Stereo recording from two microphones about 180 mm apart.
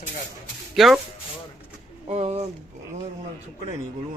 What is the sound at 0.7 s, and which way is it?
Speech, centre (ahead or behind).